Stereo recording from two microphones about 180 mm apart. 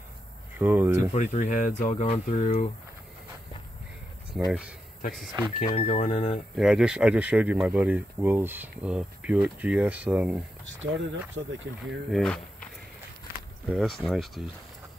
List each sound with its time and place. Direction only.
0.6 s speech: 10° right (ahead or behind)
1.1 s speech: 40° left (ahead or behind)
4.5 s speech: 5° right (ahead or behind)
5.4 s speech: 25° right (ahead or behind)
5.8 s speech: 35° left (ahead or behind)
6.5 s speech: 5° right (ahead or behind)
10.6 s speech: 90° right
12.1 s speech: 5° left (ahead or behind)
13.7 s speech: 5° left (ahead or behind)